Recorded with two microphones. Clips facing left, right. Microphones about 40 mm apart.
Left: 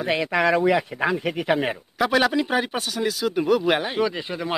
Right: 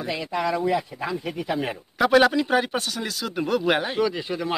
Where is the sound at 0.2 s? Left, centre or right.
Left.